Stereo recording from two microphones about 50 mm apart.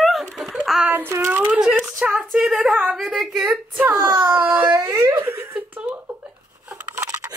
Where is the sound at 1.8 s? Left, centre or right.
Right.